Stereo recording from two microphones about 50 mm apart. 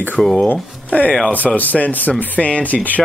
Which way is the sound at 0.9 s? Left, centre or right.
Left.